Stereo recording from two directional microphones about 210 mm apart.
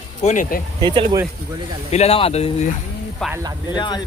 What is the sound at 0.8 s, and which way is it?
Speech, 20° right (ahead or behind).